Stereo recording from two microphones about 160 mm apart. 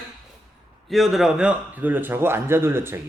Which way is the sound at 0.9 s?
Centre (ahead or behind).